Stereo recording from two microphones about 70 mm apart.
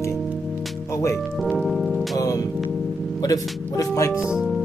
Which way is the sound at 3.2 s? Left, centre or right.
Left.